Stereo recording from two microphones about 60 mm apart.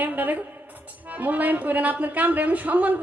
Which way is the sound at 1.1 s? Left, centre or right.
Right.